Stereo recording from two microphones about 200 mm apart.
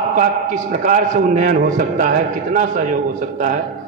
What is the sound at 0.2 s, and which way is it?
A man's voice, 40° right (ahead or behind).